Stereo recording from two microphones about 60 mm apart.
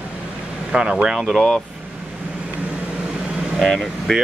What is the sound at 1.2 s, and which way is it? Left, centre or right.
Speech, centre.